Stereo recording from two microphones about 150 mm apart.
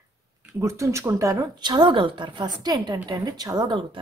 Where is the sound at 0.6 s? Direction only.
20° right (ahead or behind).